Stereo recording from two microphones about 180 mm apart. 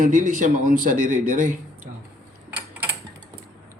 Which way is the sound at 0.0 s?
45° right (ahead or behind).